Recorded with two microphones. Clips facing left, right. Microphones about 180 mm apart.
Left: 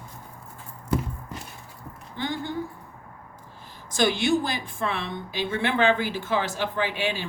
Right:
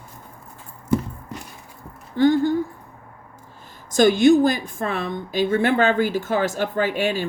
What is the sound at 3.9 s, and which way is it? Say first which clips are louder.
Speech: right 9 dB; 45° right (ahead or behind).